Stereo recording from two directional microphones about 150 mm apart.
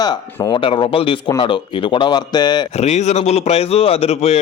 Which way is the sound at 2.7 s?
45° left (ahead or behind).